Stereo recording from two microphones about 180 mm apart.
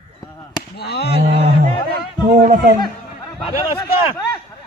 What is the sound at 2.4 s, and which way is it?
Speech, 50° right (ahead or behind).